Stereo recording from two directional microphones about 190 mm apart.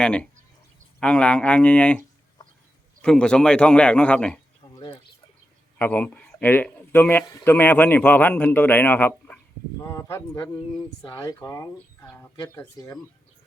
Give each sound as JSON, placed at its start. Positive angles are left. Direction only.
{"t": 0.0, "sound": "a man's voice", "side_deg": 5}
{"t": 3.0, "sound": "a man's voice", "side_deg": 5}
{"t": 4.7, "sound": "a sound", "side_deg": 25}
{"t": 5.8, "sound": "speech", "side_deg": 5}